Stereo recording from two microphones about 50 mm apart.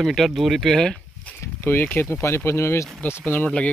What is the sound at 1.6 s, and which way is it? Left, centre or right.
Speech, left.